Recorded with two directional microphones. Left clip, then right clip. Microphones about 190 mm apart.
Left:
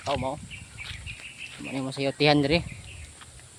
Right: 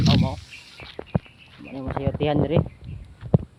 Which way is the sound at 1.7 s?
25° left (ahead or behind).